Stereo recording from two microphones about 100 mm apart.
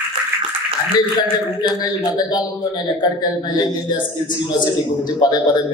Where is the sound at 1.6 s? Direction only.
40° left (ahead or behind).